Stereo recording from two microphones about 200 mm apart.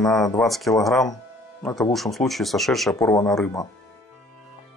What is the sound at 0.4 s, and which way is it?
Speech, centre (ahead or behind).